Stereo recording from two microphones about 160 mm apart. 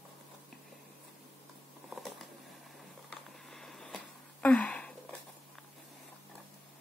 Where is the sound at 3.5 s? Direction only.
5° left (ahead or behind).